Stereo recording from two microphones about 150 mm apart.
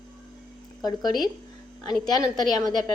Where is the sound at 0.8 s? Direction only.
25° left (ahead or behind).